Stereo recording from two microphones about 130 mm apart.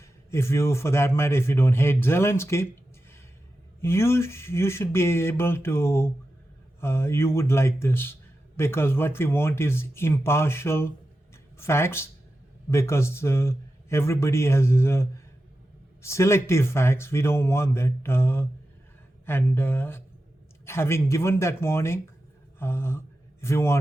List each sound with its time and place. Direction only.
0.0 s a man's voice: 20° left (ahead or behind)
3.8 s a man's voice: 20° left (ahead or behind)
22.5 s a sound: 20° left (ahead or behind)
23.4 s a man's voice: 20° left (ahead or behind)